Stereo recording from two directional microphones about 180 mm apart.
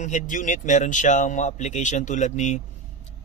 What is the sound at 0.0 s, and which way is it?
A man's voice, 45° left (ahead or behind).